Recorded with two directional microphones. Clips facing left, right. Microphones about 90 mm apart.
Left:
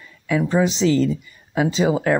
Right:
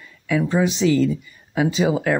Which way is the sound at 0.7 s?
30° left (ahead or behind).